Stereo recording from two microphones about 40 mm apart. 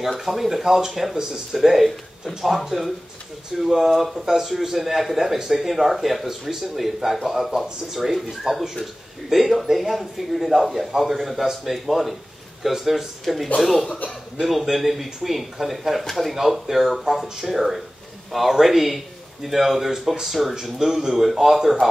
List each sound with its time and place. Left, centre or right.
0.2 s a man's voice: centre
13.8 s speech: left
14.4 s a man's voice: centre
16.3 s a man's voice: centre